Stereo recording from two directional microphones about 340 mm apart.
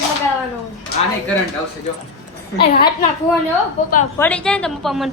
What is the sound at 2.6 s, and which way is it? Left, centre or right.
Speech, left.